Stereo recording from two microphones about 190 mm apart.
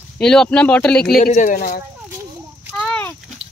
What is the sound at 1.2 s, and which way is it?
Speech, 40° left (ahead or behind).